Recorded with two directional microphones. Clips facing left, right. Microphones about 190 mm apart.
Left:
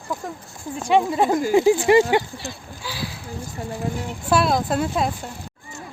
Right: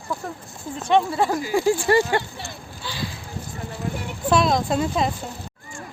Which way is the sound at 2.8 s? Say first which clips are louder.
Even; 5° left (ahead or behind).